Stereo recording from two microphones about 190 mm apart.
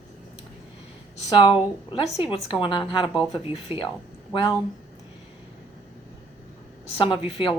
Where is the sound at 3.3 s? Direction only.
25° left (ahead or behind).